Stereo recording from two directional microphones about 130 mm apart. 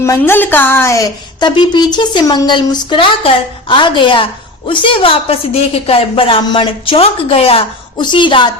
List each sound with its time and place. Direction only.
0.0 s a woman's voice: 20° left (ahead or behind); by 8.4 s 40° left (ahead or behind)